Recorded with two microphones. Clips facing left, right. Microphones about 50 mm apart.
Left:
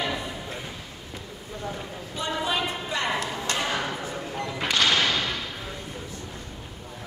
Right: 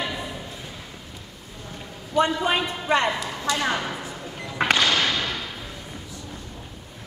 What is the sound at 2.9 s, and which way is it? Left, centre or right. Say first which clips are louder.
Speech: right 10 dB; right.